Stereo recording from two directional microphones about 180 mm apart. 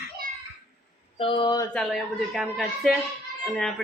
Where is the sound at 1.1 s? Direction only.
30° left (ahead or behind).